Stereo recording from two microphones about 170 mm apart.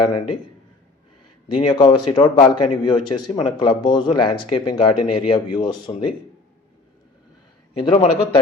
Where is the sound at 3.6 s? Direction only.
25° left (ahead or behind).